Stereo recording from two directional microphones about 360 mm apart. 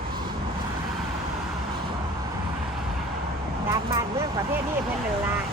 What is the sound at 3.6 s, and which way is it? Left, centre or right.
Speech, centre.